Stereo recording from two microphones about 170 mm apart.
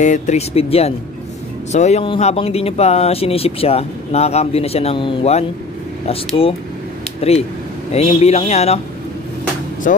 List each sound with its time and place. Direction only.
0.0 s speech: 45° left (ahead or behind)
9.8 s speech: 55° left (ahead or behind)